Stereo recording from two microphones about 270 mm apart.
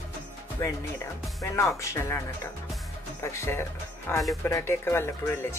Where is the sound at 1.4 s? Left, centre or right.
Centre.